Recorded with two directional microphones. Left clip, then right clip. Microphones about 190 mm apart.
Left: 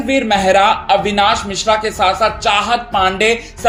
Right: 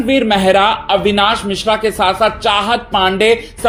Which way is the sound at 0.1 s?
35° right (ahead or behind).